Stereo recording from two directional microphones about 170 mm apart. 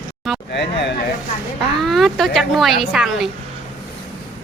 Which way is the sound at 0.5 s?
90° left.